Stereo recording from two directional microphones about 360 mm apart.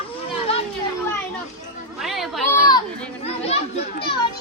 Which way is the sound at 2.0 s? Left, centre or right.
Centre.